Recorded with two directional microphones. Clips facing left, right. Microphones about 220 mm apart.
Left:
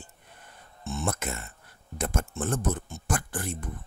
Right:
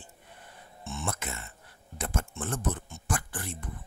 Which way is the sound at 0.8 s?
40° left (ahead or behind).